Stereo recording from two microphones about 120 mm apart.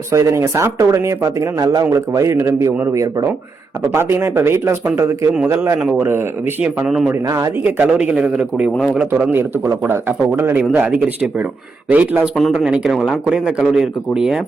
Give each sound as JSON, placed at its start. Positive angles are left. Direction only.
{"t": 0.1, "sound": "speech", "side_deg": -25}
{"t": 7.1, "sound": "speech", "side_deg": -25}
{"t": 12.4, "sound": "speech", "side_deg": 0}